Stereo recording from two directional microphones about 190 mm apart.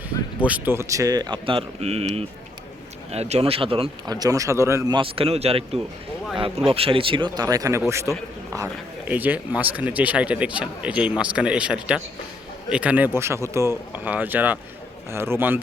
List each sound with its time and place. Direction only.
0.4 s speech: 10° right (ahead or behind)